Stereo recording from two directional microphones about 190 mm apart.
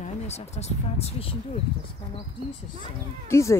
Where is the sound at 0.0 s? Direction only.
35° left (ahead or behind).